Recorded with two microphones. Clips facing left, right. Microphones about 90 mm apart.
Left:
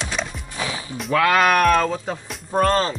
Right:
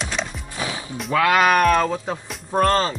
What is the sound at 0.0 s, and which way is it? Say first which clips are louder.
Music: even; centre (ahead or behind).